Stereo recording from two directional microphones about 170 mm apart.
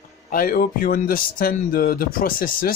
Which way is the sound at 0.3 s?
55° left (ahead or behind).